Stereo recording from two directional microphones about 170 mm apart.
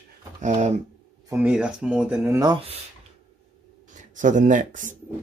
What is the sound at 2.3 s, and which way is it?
Speech, 25° right (ahead or behind).